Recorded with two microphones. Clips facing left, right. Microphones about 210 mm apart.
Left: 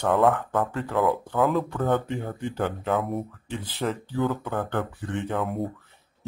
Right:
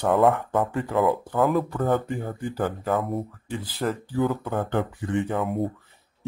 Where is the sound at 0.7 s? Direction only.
15° right (ahead or behind).